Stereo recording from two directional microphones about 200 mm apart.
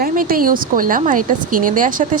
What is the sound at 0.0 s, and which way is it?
A woman's voice, 45° right (ahead or behind).